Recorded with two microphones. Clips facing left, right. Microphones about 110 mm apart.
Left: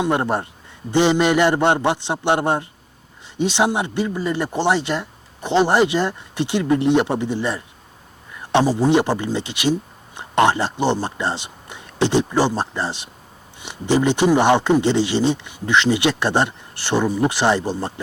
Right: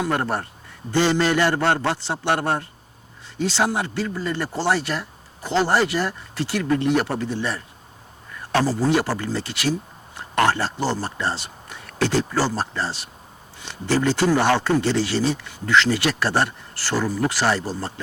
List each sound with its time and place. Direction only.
0.0 s speech: 20° left (ahead or behind)